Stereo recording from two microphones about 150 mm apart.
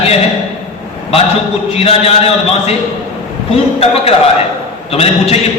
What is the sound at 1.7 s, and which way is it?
Speech, 40° left (ahead or behind).